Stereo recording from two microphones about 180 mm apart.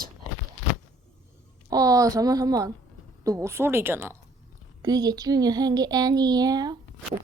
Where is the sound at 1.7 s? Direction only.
20° right (ahead or behind).